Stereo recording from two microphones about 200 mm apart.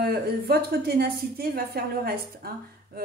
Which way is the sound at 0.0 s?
50° right (ahead or behind).